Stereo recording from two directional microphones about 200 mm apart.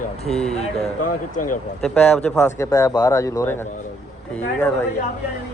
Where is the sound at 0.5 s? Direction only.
30° left (ahead or behind).